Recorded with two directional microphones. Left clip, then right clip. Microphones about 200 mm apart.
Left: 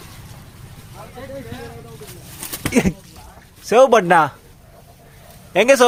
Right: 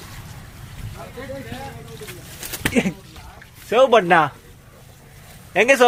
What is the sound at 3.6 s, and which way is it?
Speech, 40° left (ahead or behind).